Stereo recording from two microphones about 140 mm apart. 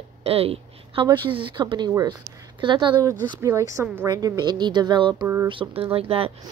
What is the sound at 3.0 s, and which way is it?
A woman's voice, 20° right (ahead or behind).